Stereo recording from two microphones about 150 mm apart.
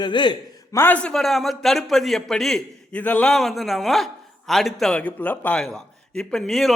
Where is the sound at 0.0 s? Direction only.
30° left (ahead or behind).